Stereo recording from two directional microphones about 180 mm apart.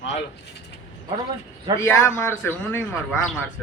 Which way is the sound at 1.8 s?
20° left (ahead or behind).